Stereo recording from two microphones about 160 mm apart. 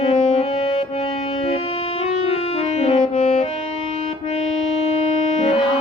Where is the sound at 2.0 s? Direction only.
40° left (ahead or behind).